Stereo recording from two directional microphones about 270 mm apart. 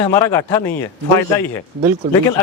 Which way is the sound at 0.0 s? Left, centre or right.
Centre.